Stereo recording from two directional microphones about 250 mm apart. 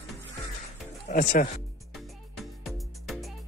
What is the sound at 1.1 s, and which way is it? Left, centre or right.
Speech, left.